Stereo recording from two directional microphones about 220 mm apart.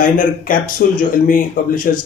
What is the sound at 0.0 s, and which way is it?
Speech, 40° left (ahead or behind).